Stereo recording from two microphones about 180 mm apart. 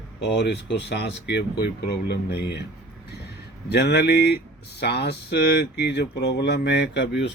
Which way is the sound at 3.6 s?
70° left (ahead or behind).